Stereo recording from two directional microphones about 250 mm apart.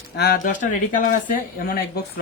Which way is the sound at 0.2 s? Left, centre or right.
Left.